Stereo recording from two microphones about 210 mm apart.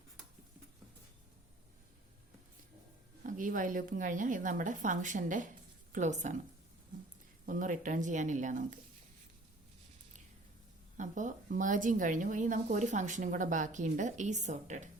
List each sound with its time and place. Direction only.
3.2 s speech: 40° right (ahead or behind)
7.4 s speech: 40° right (ahead or behind)
10.9 s speech: 35° right (ahead or behind)